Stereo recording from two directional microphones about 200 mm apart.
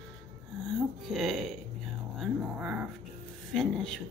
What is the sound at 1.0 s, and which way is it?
Speech, centre (ahead or behind).